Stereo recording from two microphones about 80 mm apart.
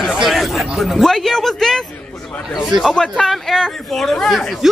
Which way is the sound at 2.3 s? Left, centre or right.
Centre.